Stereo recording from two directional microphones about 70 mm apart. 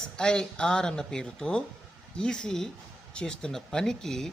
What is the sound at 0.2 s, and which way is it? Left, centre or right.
Speech, centre.